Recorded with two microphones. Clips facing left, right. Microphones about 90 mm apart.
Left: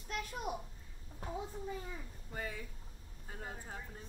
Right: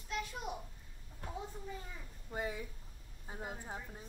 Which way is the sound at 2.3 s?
20° right (ahead or behind).